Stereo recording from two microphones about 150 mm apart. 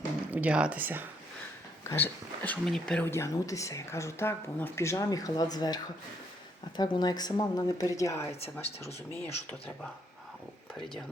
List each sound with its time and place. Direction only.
0.3 s speech: 10° right (ahead or behind)
1.8 s speech: 15° left (ahead or behind)
3.1 s speech: 20° left (ahead or behind)
9.2 s speech: 10° left (ahead or behind)